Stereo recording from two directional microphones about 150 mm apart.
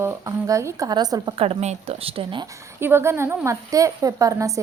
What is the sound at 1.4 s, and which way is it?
Speech, 45° right (ahead or behind).